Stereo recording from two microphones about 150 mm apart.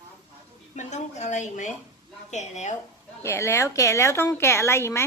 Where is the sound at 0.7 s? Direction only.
50° left (ahead or behind).